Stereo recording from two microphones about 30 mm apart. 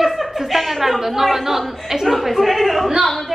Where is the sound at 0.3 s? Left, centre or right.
Centre.